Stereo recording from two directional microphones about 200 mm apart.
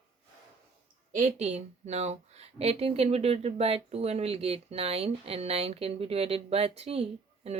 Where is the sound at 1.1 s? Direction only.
35° right (ahead or behind).